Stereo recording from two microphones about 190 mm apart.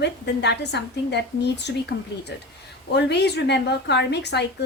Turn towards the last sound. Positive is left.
turn(degrees=60)  # may be behind; listen again after turning